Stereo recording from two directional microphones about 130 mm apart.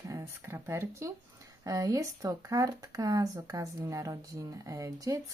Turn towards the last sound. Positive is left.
turn(degrees=-25)  # may be behind; listen again after turning